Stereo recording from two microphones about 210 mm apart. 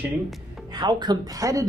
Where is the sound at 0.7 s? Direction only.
20° right (ahead or behind).